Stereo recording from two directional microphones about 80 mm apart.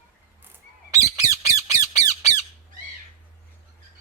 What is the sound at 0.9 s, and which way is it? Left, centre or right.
Squawk, right.